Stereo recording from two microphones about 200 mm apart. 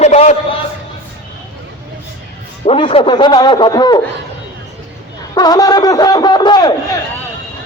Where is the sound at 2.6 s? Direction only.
25° left (ahead or behind).